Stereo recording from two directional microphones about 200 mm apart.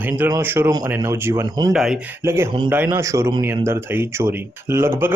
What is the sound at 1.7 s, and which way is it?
Speech, centre (ahead or behind).